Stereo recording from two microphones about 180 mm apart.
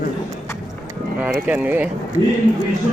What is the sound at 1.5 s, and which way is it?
Speech, 10° right (ahead or behind).